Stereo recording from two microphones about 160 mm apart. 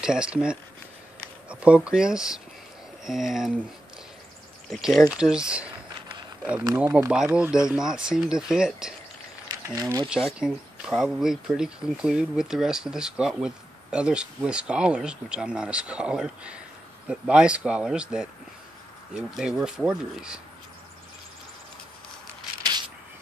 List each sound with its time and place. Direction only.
0.0 s speech: 5° right (ahead or behind)
4.6 s speech: centre (ahead or behind)
9.5 s speech: 25° right (ahead or behind)
10.0 s speech: 5° right (ahead or behind)
22.6 s a sound: 25° right (ahead or behind)